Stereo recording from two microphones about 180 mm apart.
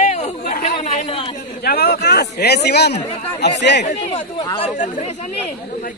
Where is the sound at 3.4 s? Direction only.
70° left (ahead or behind).